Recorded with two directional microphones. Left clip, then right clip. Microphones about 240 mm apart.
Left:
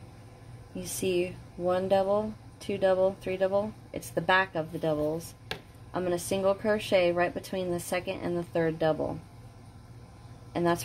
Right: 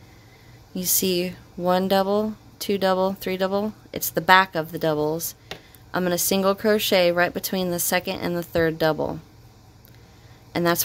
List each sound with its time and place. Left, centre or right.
0.7 s speech: right
10.5 s speech: right